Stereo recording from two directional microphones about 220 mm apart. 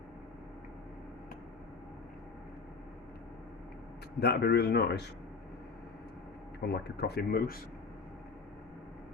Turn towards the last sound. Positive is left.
turn(degrees=45)  # may be behind; listen again after turning